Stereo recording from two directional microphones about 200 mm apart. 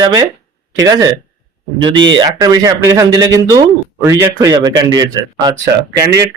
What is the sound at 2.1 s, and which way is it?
Speech, 20° right (ahead or behind).